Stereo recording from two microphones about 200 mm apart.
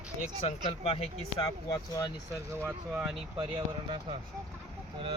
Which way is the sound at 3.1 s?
25° right (ahead or behind).